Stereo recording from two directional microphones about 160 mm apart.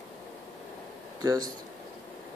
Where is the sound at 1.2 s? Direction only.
20° right (ahead or behind).